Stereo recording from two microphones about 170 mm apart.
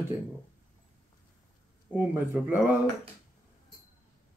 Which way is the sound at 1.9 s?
10° right (ahead or behind).